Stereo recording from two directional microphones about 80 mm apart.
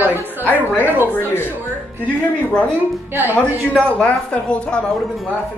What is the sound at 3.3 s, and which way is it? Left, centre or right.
Speech, centre.